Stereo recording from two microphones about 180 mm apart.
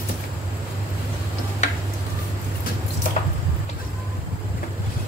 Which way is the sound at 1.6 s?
40° left (ahead or behind).